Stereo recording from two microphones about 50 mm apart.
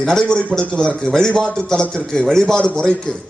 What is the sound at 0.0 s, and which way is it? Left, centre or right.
A man's voice, centre.